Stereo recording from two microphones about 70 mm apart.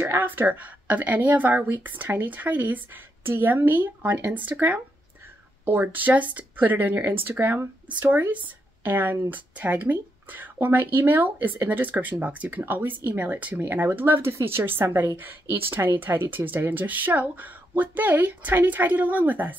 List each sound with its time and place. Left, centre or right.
0.0 s speech: right